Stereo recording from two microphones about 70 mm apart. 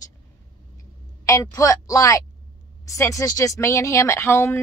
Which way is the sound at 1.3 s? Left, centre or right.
Left.